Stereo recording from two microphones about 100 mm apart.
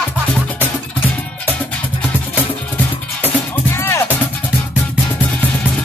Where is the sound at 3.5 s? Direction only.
25° left (ahead or behind).